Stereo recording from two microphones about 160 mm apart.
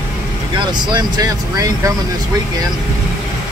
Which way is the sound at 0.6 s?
30° right (ahead or behind).